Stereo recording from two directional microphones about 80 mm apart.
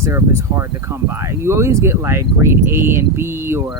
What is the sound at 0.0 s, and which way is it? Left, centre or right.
Speech, right.